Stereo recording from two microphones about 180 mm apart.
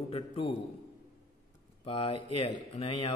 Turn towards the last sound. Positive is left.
turn(degrees=30)  # may be behind; listen again after turning